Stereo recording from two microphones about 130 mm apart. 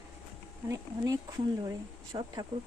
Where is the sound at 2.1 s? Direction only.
35° right (ahead or behind).